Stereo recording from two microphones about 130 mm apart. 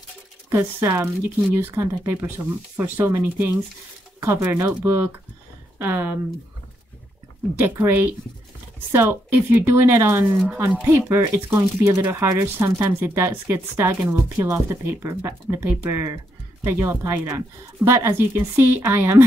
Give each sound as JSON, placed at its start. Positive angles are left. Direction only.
{"t": 0.5, "sound": "speech", "side_deg": -20}
{"t": 7.6, "sound": "speech", "side_deg": -15}